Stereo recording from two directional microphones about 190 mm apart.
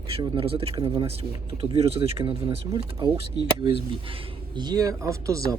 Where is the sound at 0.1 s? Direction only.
30° right (ahead or behind).